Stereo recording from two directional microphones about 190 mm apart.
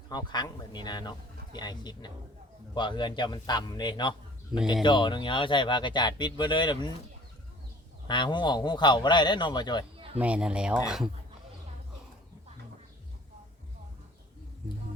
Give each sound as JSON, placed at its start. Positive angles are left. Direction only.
{"t": 0.1, "sound": "speech", "side_deg": 25}
{"t": 8.0, "sound": "speech", "side_deg": 25}
{"t": 10.2, "sound": "speech", "side_deg": -5}